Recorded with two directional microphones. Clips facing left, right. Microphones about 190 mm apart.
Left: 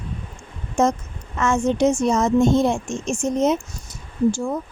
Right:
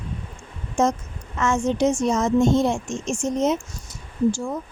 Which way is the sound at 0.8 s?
55° left (ahead or behind).